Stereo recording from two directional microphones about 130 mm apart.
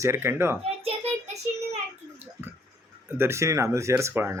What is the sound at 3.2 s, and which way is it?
Speech, 20° right (ahead or behind).